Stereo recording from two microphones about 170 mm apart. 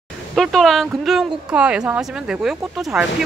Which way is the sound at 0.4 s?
Centre (ahead or behind).